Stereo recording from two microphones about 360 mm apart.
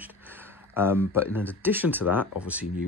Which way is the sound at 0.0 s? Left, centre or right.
Centre.